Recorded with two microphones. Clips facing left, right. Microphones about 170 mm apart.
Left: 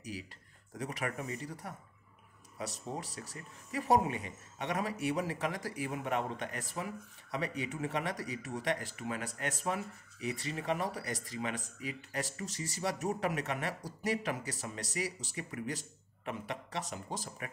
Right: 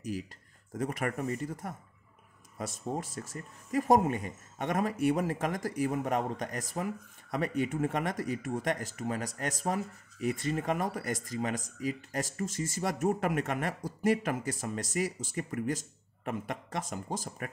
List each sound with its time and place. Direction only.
0.0 s speech: 45° right (ahead or behind)